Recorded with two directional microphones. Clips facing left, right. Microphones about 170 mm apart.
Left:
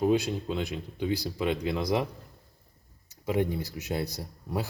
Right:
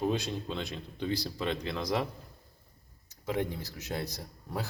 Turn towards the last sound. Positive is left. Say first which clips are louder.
# left 4 dB
turn(degrees=10)  # may be behind; listen again after turning